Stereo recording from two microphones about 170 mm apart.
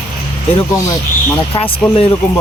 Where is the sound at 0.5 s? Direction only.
20° left (ahead or behind).